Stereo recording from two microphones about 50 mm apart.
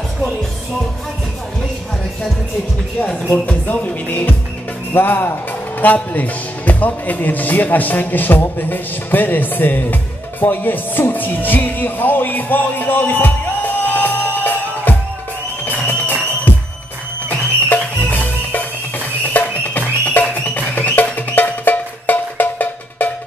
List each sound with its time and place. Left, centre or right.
3.6 s speech: left
15.6 s music: left